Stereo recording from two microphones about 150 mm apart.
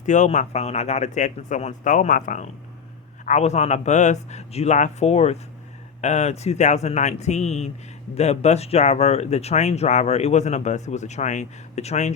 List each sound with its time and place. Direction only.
0.0 s speech: 55° left (ahead or behind)